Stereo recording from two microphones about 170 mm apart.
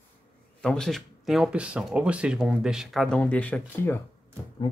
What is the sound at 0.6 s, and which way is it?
Speech, 5° left (ahead or behind).